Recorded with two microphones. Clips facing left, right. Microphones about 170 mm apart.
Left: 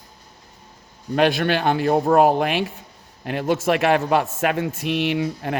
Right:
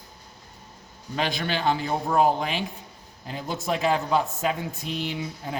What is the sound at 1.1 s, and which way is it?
Speech, 65° left (ahead or behind).